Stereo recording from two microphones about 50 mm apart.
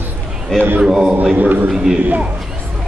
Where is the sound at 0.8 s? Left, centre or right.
Centre.